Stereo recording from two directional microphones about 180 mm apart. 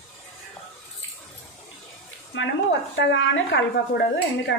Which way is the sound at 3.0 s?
80° left.